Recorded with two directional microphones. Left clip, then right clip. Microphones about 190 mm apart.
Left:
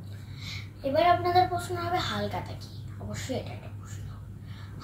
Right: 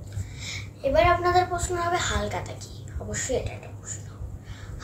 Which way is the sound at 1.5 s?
20° right (ahead or behind).